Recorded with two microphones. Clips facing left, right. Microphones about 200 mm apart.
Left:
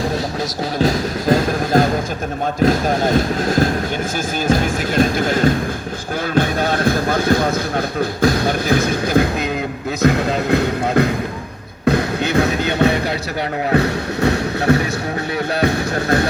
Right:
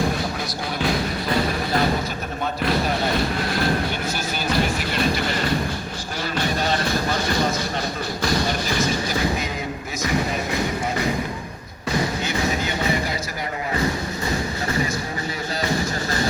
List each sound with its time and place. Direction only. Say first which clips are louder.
0.8 s speech: left 6 dB; 40° left (ahead or behind)
4.4 s music: left 5 dB; 50° left (ahead or behind)